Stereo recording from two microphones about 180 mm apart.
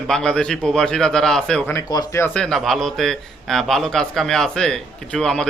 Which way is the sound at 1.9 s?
20° left (ahead or behind).